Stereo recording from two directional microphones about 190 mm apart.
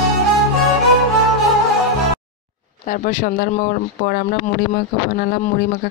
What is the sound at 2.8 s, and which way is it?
Speech, 45° left (ahead or behind).